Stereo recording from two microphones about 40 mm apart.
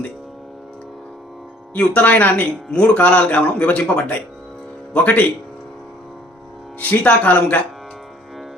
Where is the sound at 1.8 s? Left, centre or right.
Left.